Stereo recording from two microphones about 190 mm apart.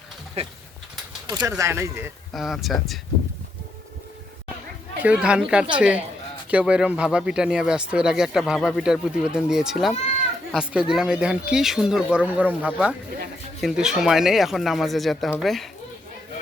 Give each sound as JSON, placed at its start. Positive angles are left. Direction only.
{"t": 0.4, "sound": "speech", "side_deg": -35}
{"t": 1.3, "sound": "speech", "side_deg": -20}
{"t": 2.3, "sound": "speech", "side_deg": 0}
{"t": 5.0, "sound": "speech", "side_deg": -5}